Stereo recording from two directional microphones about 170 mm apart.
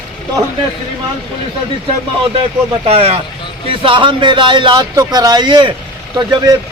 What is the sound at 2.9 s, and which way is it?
A man's voice, 35° right (ahead or behind).